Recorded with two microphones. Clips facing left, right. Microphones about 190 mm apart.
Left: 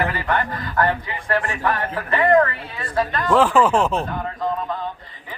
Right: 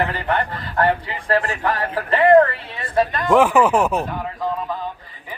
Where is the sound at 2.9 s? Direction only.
20° right (ahead or behind).